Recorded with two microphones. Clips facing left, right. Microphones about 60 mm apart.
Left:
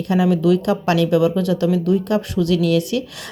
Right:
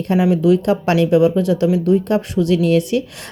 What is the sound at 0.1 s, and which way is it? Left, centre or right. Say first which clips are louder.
Speech: right 2 dB; right.